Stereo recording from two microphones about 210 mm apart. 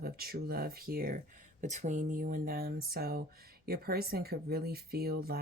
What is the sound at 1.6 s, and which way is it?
Speech, 35° right (ahead or behind).